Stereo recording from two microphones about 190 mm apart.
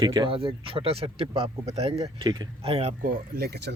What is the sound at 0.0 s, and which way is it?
Speech, 20° right (ahead or behind).